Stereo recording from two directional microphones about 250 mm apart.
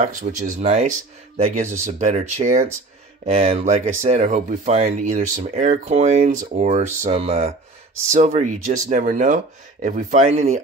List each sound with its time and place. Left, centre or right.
0.0 s speech: right